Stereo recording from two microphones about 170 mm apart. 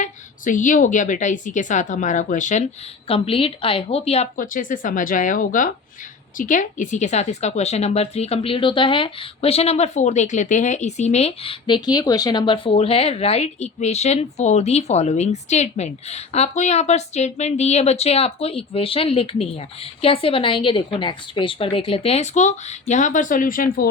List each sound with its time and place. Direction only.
0.0 s a woman's voice: 50° left (ahead or behind)
3.1 s a woman's voice: 35° left (ahead or behind)
4.4 s a woman's voice: 50° left (ahead or behind)